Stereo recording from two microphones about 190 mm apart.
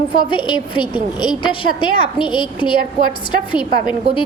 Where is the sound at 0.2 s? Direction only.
25° left (ahead or behind).